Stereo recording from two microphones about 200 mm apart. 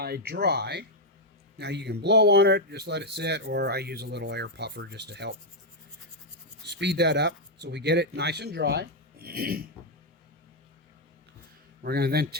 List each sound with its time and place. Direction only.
0.0 s speech: 50° right (ahead or behind)
6.7 s speech: 60° right (ahead or behind)
11.8 s speech: 50° right (ahead or behind)